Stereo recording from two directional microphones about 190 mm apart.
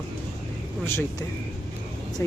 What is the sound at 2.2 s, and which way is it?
Speech, 15° left (ahead or behind).